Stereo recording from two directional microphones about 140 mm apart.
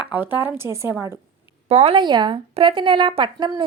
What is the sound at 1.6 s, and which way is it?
Speech, 45° right (ahead or behind).